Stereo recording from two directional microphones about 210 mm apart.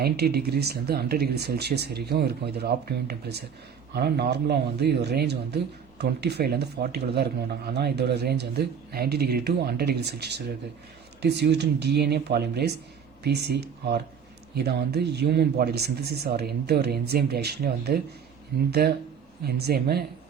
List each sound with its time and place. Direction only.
0.0 s speech: 50° right (ahead or behind)